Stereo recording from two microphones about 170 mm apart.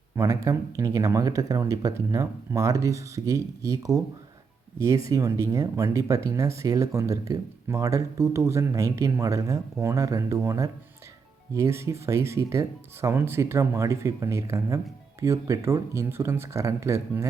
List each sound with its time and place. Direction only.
0.2 s speech: 20° right (ahead or behind)
5.0 s speech: 20° right (ahead or behind)